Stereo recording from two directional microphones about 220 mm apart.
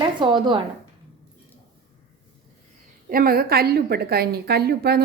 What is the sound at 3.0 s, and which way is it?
A woman's voice, 40° right (ahead or behind).